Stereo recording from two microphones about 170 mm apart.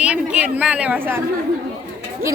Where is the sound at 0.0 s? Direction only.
5° right (ahead or behind).